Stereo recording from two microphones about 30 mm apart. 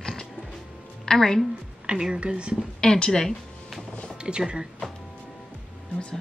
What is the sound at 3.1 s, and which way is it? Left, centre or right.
Speech, centre.